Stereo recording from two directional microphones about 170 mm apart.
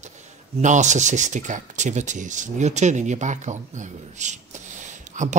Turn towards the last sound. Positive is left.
turn(degrees=-45)  # may be behind; listen again after turning